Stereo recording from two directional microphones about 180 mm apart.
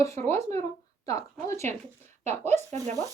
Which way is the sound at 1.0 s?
15° left (ahead or behind).